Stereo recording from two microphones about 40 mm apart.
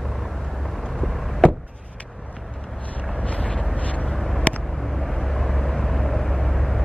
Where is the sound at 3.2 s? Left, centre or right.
Left.